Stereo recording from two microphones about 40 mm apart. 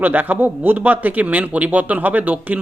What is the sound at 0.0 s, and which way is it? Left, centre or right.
A man's voice, right.